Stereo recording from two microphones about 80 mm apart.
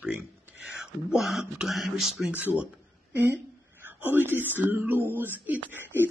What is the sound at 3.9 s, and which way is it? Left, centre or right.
Speech, right.